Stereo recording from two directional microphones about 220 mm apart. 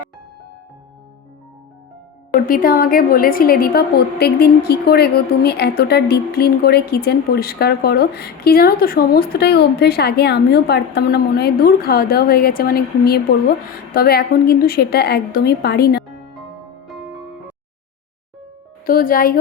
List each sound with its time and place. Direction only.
2.3 s a woman's voice: 40° left (ahead or behind)
16.8 s music: centre (ahead or behind)
18.9 s speech: 40° left (ahead or behind)